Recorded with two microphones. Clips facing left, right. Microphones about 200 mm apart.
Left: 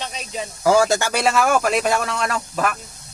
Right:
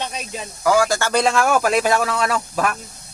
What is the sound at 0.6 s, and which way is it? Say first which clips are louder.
Speech: left 1 dB; 25° left (ahead or behind).